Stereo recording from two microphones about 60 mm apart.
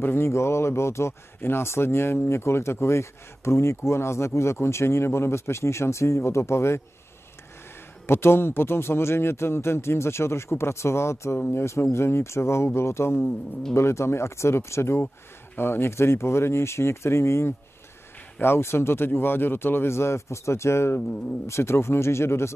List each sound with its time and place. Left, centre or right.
0.0 s speech: left
0.3 s speech: left
8.1 s speech: left
13.2 s speech: centre
13.7 s speech: left